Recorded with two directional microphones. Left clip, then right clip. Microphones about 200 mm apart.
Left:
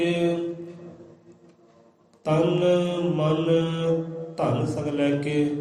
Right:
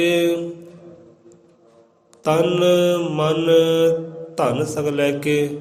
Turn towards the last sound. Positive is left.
turn(degrees=-50)  # may be behind; listen again after turning